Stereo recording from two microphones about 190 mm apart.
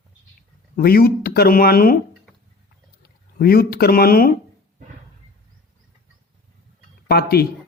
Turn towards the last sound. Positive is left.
turn(degrees=55)  # may be behind; listen again after turning